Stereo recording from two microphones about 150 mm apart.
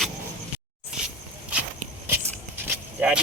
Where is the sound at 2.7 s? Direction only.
10° right (ahead or behind).